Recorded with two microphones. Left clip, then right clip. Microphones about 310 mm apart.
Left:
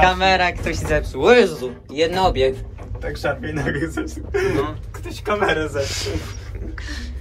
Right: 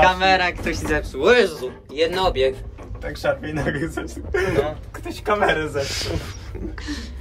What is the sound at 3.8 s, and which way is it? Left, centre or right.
Speech, centre.